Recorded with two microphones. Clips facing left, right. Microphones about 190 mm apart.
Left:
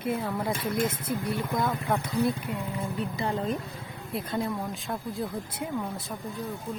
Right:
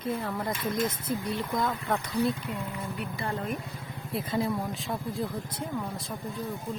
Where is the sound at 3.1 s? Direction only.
20° left (ahead or behind).